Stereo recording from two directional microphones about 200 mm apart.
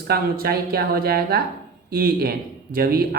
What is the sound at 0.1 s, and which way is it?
Speech, 50° right (ahead or behind).